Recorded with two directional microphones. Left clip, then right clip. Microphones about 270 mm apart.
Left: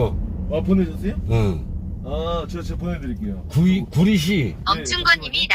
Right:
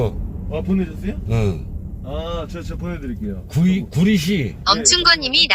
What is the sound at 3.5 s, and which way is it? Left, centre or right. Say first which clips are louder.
Speech: even; right.